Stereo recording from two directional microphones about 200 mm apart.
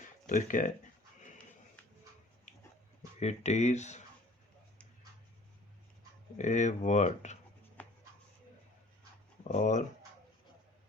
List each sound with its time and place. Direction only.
0.3 s speech: 40° left (ahead or behind)
3.2 s speech: 35° left (ahead or behind)
6.3 s speech: 35° left (ahead or behind)
9.5 s speech: 35° left (ahead or behind)